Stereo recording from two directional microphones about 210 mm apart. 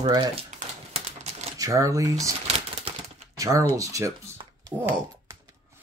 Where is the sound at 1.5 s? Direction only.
15° right (ahead or behind).